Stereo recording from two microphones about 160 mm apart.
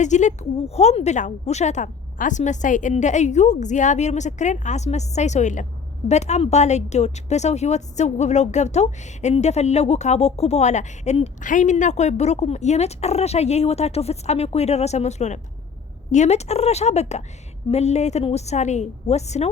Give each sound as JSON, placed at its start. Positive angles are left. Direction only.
{"t": 0.0, "sound": "a woman's voice", "side_deg": 50}